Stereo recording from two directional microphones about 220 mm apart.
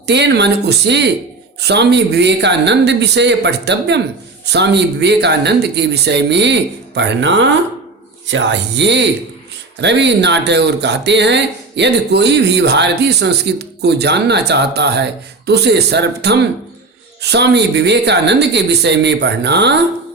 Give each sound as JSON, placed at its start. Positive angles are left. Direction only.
{"t": 0.0, "sound": "speech", "side_deg": -50}